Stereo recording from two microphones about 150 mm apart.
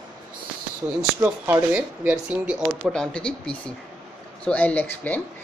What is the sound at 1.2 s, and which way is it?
Speech, 10° right (ahead or behind).